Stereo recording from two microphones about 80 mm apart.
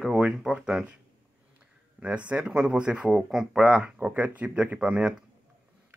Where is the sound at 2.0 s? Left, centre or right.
Centre.